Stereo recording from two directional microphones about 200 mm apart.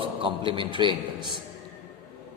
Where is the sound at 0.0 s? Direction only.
25° right (ahead or behind).